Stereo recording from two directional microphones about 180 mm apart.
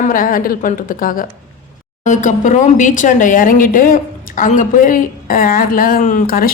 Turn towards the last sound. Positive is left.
turn(degrees=50)  # may be behind; listen again after turning